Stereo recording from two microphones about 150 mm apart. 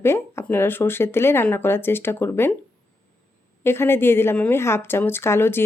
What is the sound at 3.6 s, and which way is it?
A woman's voice, 15° left (ahead or behind).